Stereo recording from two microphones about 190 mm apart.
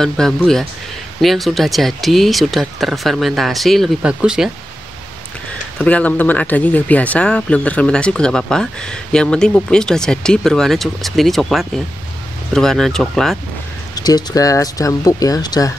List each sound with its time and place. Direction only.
0.0 s speech: centre (ahead or behind)
5.8 s speech: 5° left (ahead or behind)
13.9 s speech: 20° left (ahead or behind)